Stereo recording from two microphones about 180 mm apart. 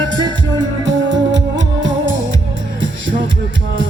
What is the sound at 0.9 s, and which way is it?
Music, 90° right.